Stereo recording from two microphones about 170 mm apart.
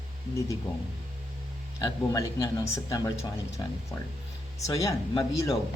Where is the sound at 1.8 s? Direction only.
20° left (ahead or behind).